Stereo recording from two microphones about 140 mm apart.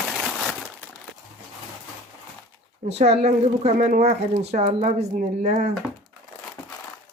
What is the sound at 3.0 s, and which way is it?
A woman's voice, 50° right (ahead or behind).